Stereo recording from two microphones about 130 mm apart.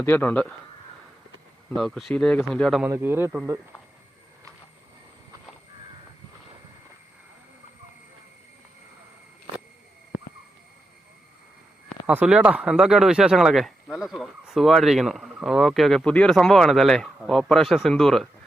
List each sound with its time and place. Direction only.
0.0 s speech: 15° left (ahead or behind)
1.7 s speech: centre (ahead or behind)
2.9 s a man's voice: 20° right (ahead or behind)
11.9 s speech: 5° right (ahead or behind)